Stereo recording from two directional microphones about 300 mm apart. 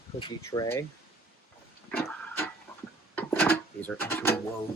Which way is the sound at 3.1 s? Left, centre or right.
Centre.